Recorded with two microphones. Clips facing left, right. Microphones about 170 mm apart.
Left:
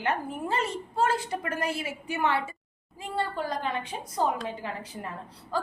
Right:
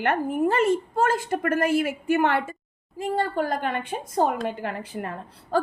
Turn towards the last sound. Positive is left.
turn(degrees=-60)  # may be behind; listen again after turning